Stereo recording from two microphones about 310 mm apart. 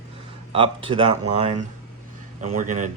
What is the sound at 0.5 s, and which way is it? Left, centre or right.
Speech, centre.